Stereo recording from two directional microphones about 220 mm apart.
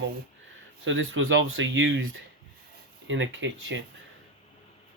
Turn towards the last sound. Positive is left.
turn(degrees=-55)  # may be behind; listen again after turning